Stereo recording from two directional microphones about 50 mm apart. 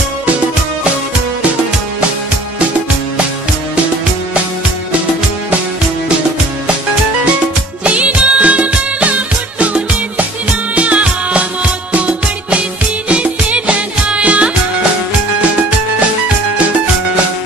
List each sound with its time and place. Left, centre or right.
7.8 s music: right